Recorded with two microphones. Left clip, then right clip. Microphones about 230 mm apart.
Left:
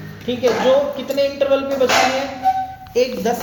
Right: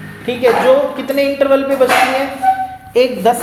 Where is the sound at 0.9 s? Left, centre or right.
Right.